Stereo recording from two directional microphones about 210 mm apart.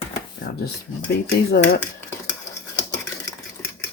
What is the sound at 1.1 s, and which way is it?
Speech, 50° left (ahead or behind).